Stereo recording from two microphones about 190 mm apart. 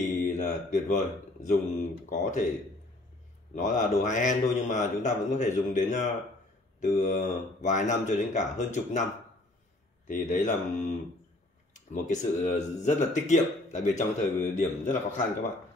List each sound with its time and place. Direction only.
0.2 s speech: 40° left (ahead or behind)
3.5 s a man's voice: 40° left (ahead or behind)
10.0 s a man's voice: 45° left (ahead or behind)